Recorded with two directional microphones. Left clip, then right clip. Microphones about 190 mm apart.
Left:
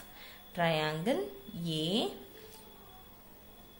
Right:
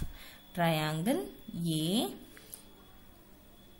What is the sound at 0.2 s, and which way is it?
Speech, 30° right (ahead or behind).